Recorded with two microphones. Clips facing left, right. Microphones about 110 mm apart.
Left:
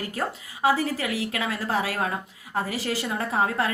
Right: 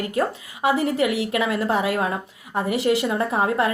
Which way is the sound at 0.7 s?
25° right (ahead or behind).